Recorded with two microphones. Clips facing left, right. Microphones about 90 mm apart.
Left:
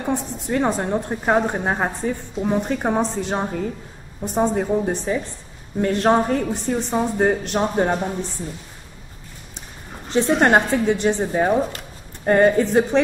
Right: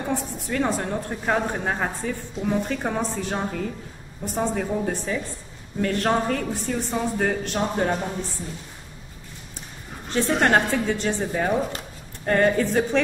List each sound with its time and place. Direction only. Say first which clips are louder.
0.1 s a woman's voice: left 6 dB; 20° left (ahead or behind)
10.0 s a woman's voice: left 4 dB; 20° left (ahead or behind)